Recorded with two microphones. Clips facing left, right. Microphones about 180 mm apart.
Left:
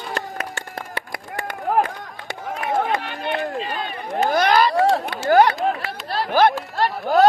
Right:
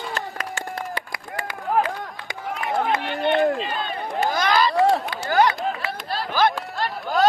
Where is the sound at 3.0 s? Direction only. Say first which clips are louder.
Right 6 dB; 30° right (ahead or behind).